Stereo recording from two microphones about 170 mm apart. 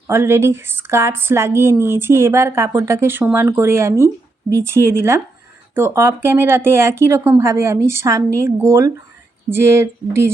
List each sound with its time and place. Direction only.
0.1 s a woman's voice: 15° right (ahead or behind)